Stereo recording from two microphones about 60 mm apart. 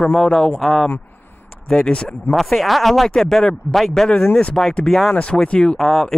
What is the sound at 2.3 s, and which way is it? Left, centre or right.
Speech, centre.